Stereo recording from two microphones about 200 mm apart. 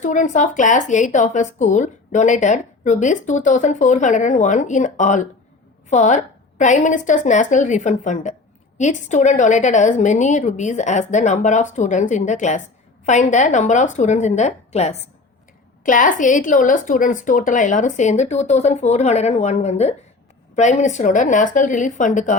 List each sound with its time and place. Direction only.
0.0 s speech: 40° left (ahead or behind)